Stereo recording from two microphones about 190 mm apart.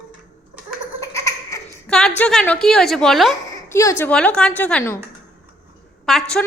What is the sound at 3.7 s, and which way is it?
A woman's voice, 15° left (ahead or behind).